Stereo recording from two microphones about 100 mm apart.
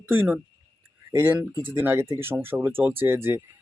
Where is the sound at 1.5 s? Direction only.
55° right (ahead or behind).